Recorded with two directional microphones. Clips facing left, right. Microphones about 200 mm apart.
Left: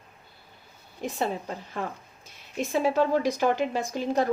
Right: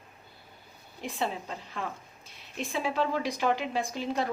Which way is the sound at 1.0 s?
45° left (ahead or behind).